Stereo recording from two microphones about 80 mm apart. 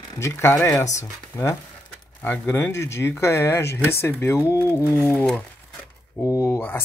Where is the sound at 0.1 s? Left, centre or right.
Left.